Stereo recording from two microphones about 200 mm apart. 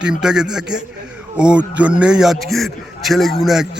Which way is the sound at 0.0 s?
5° right (ahead or behind).